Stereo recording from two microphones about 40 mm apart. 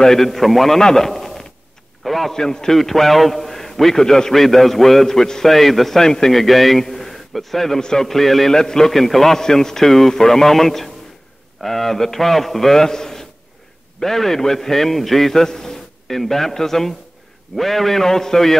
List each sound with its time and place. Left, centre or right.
0.0 s a man's voice: centre
0.7 s a sound: centre
2.0 s a man's voice: centre
2.3 s a man's voice: centre
6.4 s a man's voice: centre
8.9 s a man's voice: centre